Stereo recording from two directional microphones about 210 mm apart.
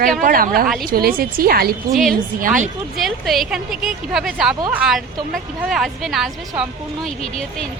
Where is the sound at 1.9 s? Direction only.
Centre (ahead or behind).